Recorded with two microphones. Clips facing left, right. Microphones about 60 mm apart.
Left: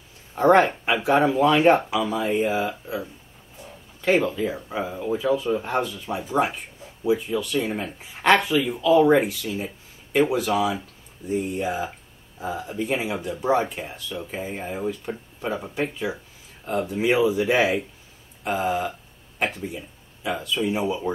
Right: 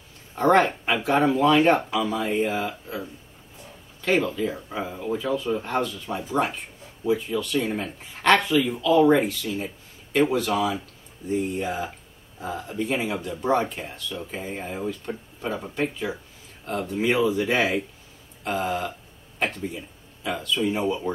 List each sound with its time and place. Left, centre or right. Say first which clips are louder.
0.4 s speech: left 2 dB; centre